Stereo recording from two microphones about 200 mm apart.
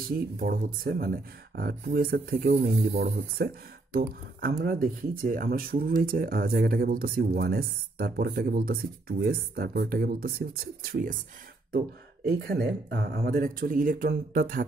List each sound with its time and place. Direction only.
0.4 s speech: 45° right (ahead or behind)
12.4 s speech: 50° right (ahead or behind)